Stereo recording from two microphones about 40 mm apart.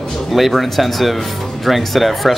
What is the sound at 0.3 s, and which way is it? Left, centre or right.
Speech, centre.